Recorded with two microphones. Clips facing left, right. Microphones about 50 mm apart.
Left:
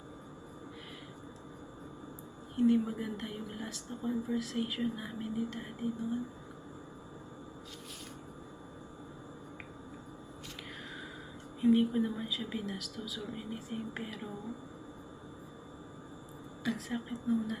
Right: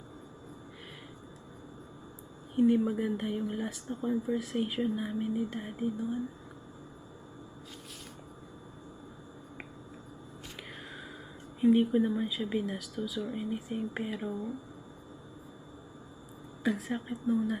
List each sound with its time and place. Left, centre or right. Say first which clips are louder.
2.6 s speech: right 3 dB; centre
11.6 s speech: right 3 dB; centre
16.6 s speech: right 4 dB; centre